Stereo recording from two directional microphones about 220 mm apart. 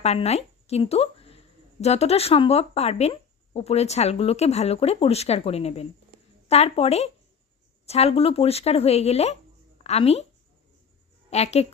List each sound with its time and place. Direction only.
0.0 s speech: 30° left (ahead or behind)
11.3 s speech: 30° left (ahead or behind)